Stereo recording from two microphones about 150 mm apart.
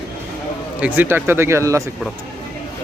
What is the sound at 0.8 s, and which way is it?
A man's voice, 15° right (ahead or behind).